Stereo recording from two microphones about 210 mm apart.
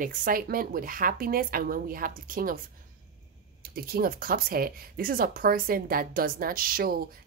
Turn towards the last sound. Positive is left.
turn(degrees=-45)  # may be behind; listen again after turning